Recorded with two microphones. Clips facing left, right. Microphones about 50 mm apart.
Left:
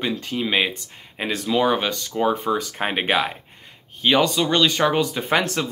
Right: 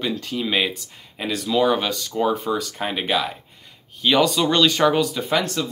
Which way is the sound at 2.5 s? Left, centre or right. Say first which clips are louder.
Left 1 dB; left.